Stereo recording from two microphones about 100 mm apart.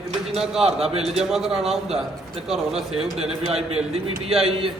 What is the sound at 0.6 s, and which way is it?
Speech, 75° right (ahead or behind).